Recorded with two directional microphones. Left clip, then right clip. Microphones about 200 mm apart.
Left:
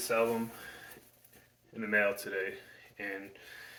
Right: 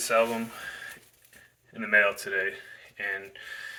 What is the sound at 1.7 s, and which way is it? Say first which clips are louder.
Speech: right 7 dB; 10° left (ahead or behind).